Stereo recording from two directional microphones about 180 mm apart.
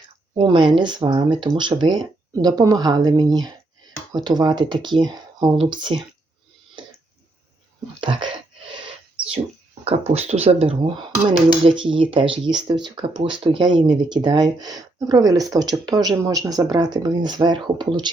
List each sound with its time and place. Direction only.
0.3 s speech: 25° right (ahead or behind)
8.1 s speech: 25° right (ahead or behind)
9.8 s speech: 35° right (ahead or behind)